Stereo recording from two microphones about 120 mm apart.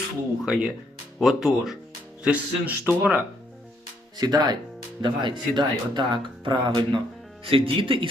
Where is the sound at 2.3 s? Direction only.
10° right (ahead or behind).